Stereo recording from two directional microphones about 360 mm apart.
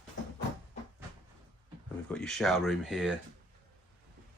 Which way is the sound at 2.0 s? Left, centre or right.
Centre.